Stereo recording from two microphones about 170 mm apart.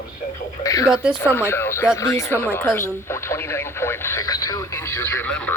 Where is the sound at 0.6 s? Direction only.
20° left (ahead or behind).